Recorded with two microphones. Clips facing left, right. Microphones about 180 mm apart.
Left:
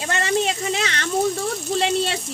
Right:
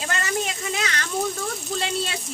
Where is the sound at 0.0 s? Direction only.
30° left (ahead or behind).